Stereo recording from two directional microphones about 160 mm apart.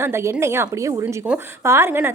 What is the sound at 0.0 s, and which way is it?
A woman's voice, 15° right (ahead or behind).